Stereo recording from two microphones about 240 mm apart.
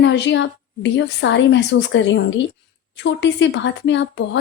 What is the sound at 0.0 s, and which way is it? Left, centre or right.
A woman's voice, left.